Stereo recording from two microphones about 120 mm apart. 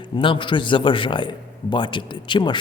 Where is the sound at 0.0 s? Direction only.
45° left (ahead or behind).